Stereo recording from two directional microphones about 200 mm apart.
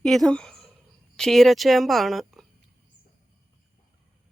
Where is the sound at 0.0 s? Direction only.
Centre (ahead or behind).